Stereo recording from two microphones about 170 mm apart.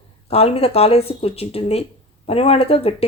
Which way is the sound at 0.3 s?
35° left (ahead or behind).